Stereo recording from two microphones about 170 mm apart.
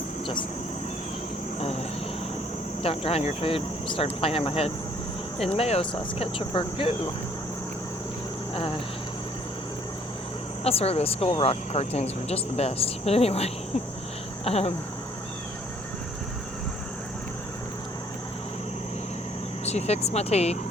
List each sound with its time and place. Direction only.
2.8 s speech: 35° left (ahead or behind)
10.6 s speech: 35° left (ahead or behind)
19.6 s speech: 40° left (ahead or behind)